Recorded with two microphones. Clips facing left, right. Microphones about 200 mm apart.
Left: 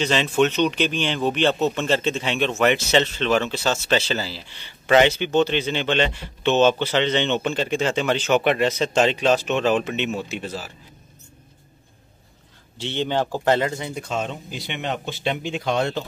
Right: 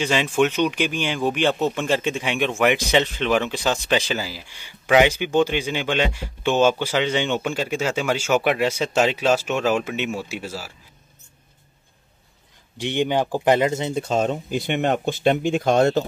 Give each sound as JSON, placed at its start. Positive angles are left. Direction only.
{"t": 0.0, "sound": "speech", "side_deg": -10}
{"t": 12.7, "sound": "speech", "side_deg": -15}